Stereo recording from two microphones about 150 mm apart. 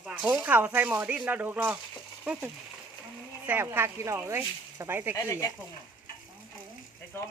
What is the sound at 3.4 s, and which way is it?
Speech, 15° right (ahead or behind).